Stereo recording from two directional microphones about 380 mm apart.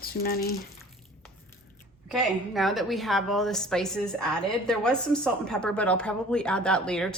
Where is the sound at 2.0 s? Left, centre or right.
Centre.